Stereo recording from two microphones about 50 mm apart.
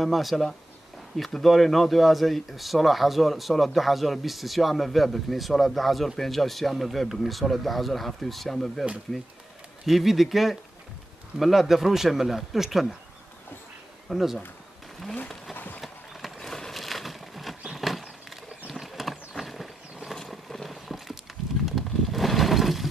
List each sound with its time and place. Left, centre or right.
0.0 s speech: centre
14.0 s speech: centre
15.5 s clip-clop: left
15.8 s a sound: centre
20.1 s vehicle: centre
21.6 s a sound: centre